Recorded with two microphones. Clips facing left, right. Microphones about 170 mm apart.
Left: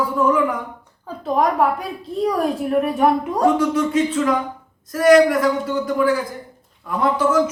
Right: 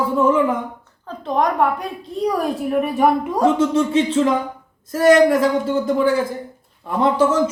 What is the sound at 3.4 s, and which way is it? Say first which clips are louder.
A man's voice: right 1 dB; 25° right (ahead or behind).